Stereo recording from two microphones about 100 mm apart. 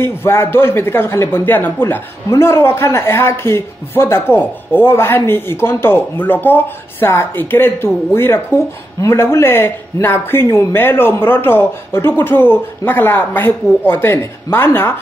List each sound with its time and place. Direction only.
0.0 s speech: 25° left (ahead or behind)